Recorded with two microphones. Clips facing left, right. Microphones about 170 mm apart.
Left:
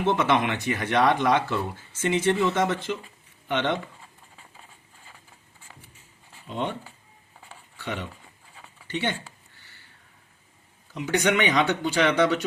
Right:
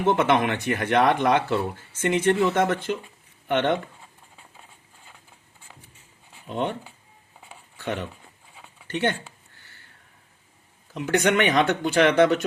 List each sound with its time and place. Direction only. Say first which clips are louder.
0.0 s speech: right 2 dB; 50° right (ahead or behind)
6.5 s speech: right 3 dB; 50° right (ahead or behind)
8.5 s a sound: even; centre (ahead or behind)
8.9 s speech: right 4 dB; 50° right (ahead or behind)
10.9 s speech: right 2 dB; 50° right (ahead or behind)